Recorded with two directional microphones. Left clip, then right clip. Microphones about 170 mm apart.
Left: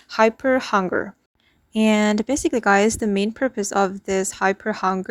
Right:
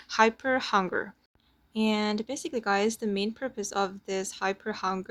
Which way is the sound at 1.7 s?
50° left (ahead or behind).